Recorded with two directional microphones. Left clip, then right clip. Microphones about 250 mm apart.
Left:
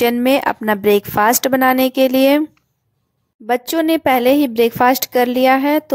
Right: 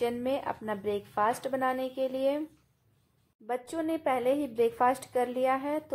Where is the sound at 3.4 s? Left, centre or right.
Left.